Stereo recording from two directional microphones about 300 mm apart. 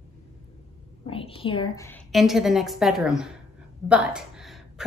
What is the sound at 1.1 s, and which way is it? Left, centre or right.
A woman's voice, centre.